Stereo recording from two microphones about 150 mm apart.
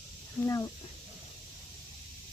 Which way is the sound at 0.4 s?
20° left (ahead or behind).